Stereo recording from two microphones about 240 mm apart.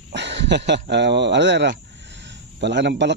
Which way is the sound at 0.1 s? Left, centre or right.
Right.